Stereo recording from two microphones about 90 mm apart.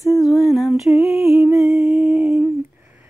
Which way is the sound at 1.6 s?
20° right (ahead or behind).